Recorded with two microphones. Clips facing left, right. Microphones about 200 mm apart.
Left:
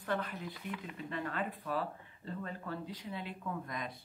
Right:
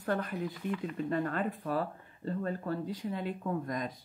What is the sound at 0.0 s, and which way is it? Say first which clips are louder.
Speech: right 5 dB; 45° right (ahead or behind).